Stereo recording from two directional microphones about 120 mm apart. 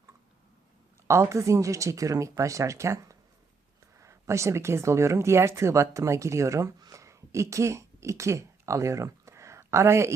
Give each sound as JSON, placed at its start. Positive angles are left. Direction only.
{"t": 1.0, "sound": "speech", "side_deg": -25}